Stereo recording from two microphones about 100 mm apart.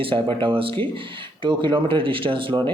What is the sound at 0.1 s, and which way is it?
Speech, 60° right (ahead or behind).